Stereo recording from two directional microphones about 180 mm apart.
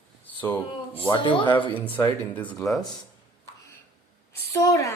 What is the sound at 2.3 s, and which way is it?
Speech, 5° left (ahead or behind).